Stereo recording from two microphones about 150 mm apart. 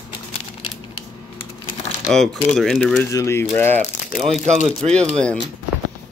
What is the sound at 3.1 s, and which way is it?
Speech, 20° left (ahead or behind).